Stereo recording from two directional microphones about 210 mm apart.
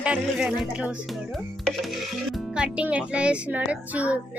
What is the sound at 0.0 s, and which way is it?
Speech, 5° right (ahead or behind).